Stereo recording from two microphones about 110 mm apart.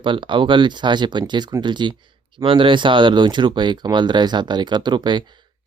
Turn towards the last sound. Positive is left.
turn(degrees=-45)  # may be behind; listen again after turning